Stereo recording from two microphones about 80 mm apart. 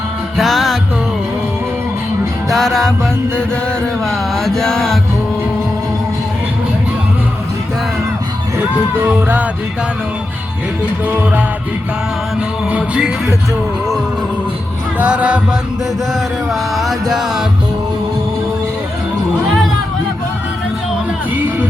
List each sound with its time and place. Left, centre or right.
0.3 s music: centre
2.5 s music: centre
4.4 s mantra: centre
9.0 s music: right
12.7 s music: centre
14.9 s music: centre
16.7 s music: centre